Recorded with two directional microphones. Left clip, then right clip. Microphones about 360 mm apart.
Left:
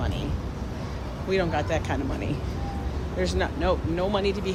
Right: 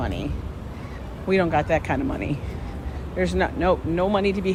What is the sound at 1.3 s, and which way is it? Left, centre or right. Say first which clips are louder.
Speech: right 5 dB; centre.